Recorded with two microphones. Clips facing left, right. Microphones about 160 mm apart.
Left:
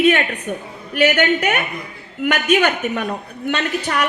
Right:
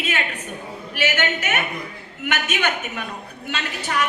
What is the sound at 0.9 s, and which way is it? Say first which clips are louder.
Speech: left 8 dB; 55° left (ahead or behind).